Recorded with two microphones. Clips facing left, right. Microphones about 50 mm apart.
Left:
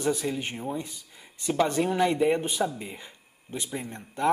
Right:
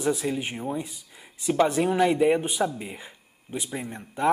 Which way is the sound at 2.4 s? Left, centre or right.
Centre.